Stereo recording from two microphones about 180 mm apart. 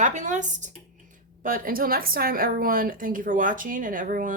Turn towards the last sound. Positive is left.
turn(degrees=-50)  # may be behind; listen again after turning